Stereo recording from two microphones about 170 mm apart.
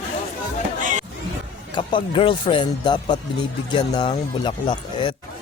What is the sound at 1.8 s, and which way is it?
Speech, 30° left (ahead or behind).